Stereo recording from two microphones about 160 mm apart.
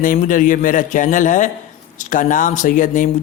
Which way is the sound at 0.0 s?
55° left (ahead or behind).